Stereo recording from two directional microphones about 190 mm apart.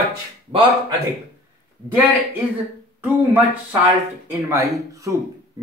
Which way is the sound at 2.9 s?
10° right (ahead or behind).